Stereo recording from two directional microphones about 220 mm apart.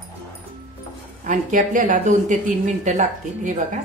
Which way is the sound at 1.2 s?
35° right (ahead or behind).